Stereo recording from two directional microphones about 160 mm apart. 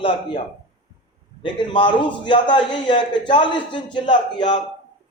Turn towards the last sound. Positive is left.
turn(degrees=30)  # may be behind; listen again after turning